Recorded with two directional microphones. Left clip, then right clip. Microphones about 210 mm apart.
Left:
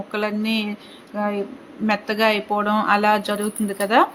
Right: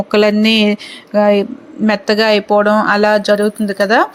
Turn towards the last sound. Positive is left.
turn(degrees=-30)  # may be behind; listen again after turning